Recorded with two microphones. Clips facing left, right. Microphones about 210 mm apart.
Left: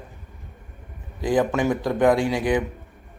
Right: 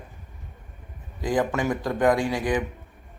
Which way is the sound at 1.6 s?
10° left (ahead or behind).